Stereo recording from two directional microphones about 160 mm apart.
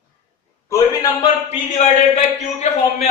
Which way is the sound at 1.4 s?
45° left (ahead or behind).